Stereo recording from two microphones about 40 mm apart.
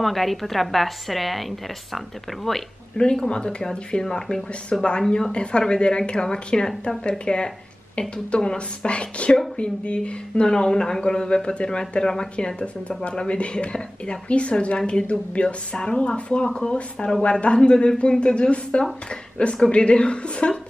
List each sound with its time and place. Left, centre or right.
0.0 s a woman's voice: centre
2.5 s speech: centre
3.0 s speech: centre
4.7 s speech: left